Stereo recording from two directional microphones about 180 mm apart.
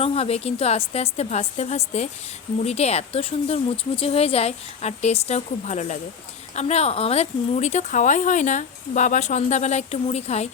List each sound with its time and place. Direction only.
0.0 s speech: 35° left (ahead or behind)